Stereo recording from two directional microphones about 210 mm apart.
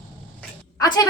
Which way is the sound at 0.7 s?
20° left (ahead or behind).